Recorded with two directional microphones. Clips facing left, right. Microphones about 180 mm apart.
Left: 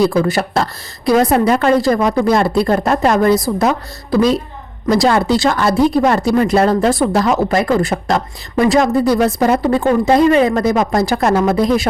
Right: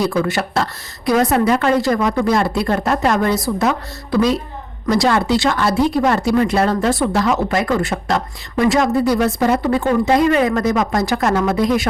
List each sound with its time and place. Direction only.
0.0 s speech: 35° left (ahead or behind)